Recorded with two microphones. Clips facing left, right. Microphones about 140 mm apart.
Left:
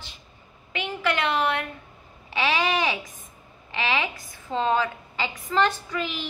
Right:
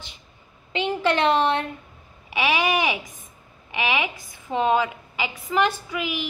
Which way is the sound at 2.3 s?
15° right (ahead or behind).